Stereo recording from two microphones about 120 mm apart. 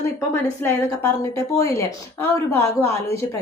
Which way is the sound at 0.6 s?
20° left (ahead or behind).